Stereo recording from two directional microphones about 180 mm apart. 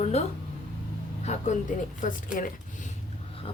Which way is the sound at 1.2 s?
40° left (ahead or behind).